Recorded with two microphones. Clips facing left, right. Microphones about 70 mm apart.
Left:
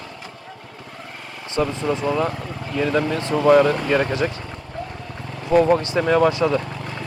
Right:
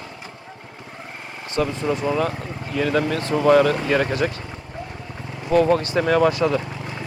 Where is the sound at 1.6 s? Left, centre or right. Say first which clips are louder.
Even; centre.